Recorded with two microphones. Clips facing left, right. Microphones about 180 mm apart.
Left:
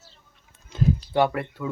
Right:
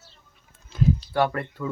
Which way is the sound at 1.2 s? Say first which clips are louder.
Left 1 dB; 5° left (ahead or behind).